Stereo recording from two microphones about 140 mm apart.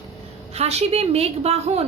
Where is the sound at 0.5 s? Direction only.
50° right (ahead or behind).